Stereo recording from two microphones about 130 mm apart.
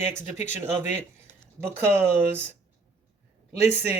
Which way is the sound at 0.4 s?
20° right (ahead or behind).